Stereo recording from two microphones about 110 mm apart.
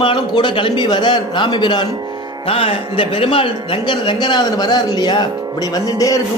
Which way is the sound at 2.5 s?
60° left (ahead or behind).